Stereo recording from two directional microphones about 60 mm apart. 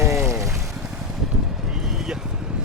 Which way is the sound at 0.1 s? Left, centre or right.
Centre.